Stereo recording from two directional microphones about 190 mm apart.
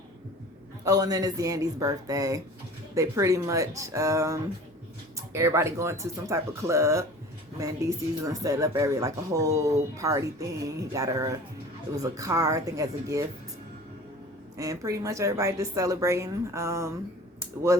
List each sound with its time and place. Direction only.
0.9 s speech: 20° right (ahead or behind)
14.6 s speech: 15° right (ahead or behind)